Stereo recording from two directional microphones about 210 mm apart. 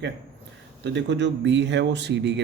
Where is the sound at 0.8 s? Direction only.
55° right (ahead or behind).